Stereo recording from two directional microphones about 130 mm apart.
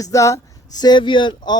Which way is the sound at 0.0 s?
25° left (ahead or behind).